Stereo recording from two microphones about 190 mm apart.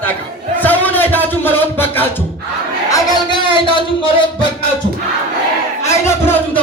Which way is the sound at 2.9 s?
20° left (ahead or behind).